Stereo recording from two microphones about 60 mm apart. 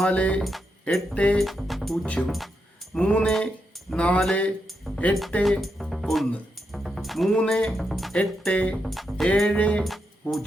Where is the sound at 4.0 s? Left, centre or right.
Left.